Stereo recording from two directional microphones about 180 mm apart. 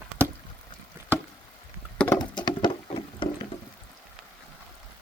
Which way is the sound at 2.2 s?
25° left (ahead or behind).